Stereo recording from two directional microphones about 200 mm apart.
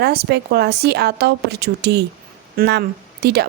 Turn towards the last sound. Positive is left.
turn(degrees=-55)  # may be behind; listen again after turning